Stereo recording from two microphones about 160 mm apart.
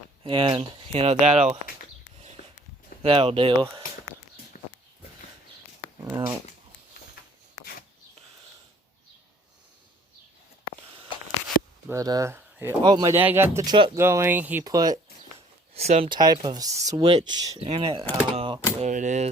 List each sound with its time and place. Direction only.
0.2 s speech: 30° right (ahead or behind)
3.0 s speech: 35° right (ahead or behind)
6.1 s a sound: 20° right (ahead or behind)
7.6 s a sound: 70° left (ahead or behind)
11.9 s speech: 20° right (ahead or behind)
12.8 s speech: 25° right (ahead or behind)
13.1 s speech: 15° right (ahead or behind)
14.6 s speech: 25° right (ahead or behind)
15.4 s a sound: 40° right (ahead or behind)
16.0 s speech: 25° right (ahead or behind)
18.8 s speech: 50° right (ahead or behind)